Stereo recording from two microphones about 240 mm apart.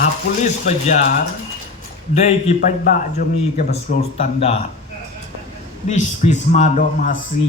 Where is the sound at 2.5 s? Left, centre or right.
Left.